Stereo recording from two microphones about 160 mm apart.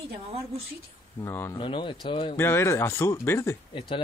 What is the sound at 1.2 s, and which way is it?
Speech, 15° left (ahead or behind).